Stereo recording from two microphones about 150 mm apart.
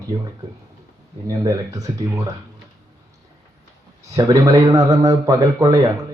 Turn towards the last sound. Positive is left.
turn(degrees=-25)  # may be behind; listen again after turning